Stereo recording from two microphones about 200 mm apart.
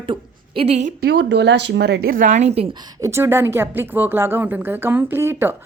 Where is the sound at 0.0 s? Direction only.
25° right (ahead or behind).